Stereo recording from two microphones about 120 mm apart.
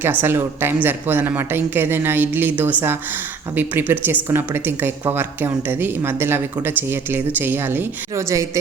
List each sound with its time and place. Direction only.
0.0 s speech: 20° right (ahead or behind)